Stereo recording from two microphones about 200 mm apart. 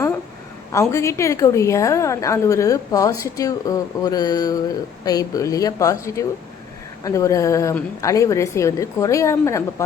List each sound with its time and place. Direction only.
0.7 s a woman's voice: 15° left (ahead or behind)